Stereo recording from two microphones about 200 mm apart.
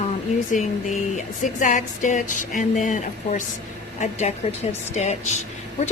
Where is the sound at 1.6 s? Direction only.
40° left (ahead or behind).